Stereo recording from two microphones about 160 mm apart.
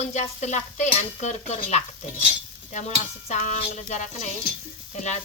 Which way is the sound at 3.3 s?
50° left (ahead or behind).